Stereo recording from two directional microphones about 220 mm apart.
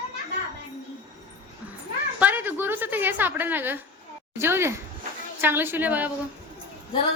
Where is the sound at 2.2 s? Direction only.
10° right (ahead or behind).